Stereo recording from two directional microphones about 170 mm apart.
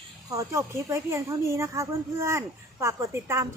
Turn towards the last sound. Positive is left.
turn(degrees=-15)  # may be behind; listen again after turning